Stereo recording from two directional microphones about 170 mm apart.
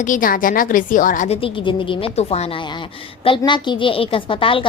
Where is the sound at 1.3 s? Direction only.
30° left (ahead or behind).